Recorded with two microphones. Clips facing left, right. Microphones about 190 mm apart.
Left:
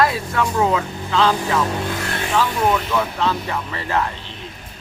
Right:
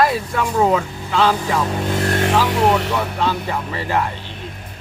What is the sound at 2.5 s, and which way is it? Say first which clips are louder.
Speech: right 3 dB; 75° right (ahead or behind).